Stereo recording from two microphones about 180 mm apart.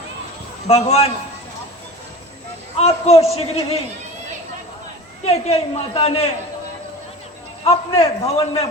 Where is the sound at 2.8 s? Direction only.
35° left (ahead or behind).